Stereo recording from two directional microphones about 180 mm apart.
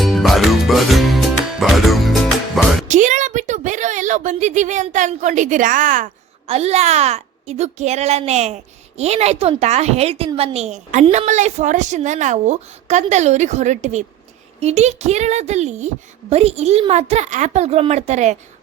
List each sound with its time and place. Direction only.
0.0 s music: centre (ahead or behind)
2.9 s a sound: 45° right (ahead or behind)
6.5 s a woman's voice: 35° right (ahead or behind)